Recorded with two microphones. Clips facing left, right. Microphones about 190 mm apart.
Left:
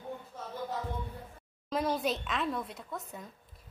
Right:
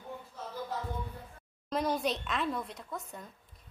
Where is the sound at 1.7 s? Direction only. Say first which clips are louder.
Even; centre (ahead or behind).